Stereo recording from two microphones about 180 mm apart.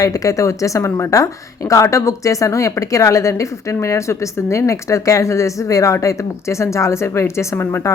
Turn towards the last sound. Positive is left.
turn(degrees=15)  # may be behind; listen again after turning